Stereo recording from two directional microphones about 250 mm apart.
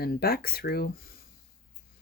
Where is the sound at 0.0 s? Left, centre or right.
Left.